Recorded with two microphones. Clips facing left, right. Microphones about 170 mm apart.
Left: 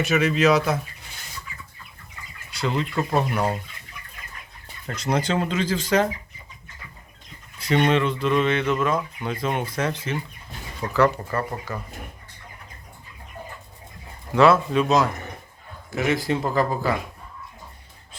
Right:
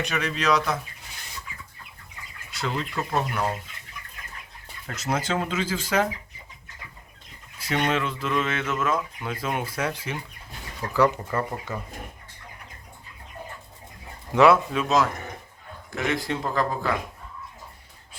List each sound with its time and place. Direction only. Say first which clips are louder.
0.0 s speech: left 7 dB; 5° left (ahead or behind)
2.5 s speech: left 4 dB; centre (ahead or behind)
4.9 s speech: left 3 dB; 5° right (ahead or behind)
7.6 s speech: left 5 dB; 5° right (ahead or behind)
14.3 s speech: left 1 dB; 15° right (ahead or behind)
14.7 s speech: left 3 dB; centre (ahead or behind)